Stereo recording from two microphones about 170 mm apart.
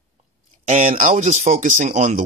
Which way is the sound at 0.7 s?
45° right (ahead or behind).